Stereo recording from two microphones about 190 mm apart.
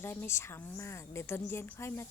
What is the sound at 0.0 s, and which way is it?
A woman's voice, 10° left (ahead or behind).